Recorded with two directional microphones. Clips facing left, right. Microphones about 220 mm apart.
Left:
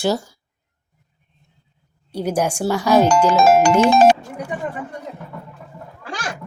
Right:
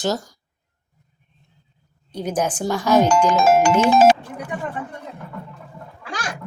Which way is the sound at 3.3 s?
40° left (ahead or behind).